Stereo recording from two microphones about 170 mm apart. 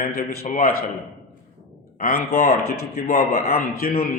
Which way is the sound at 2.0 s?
65° left (ahead or behind).